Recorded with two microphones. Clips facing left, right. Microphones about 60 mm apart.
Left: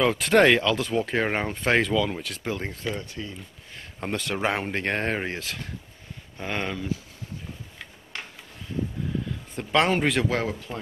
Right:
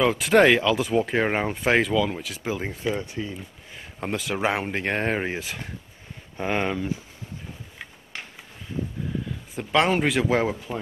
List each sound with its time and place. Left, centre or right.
0.0 s speech: centre
4.0 s speech: centre
9.6 s speech: centre